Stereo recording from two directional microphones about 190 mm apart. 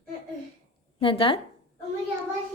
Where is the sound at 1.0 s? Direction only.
30° left (ahead or behind).